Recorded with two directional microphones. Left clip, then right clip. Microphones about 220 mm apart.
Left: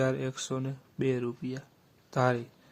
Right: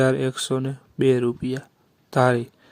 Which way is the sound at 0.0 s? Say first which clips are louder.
Right 10 dB; 30° right (ahead or behind).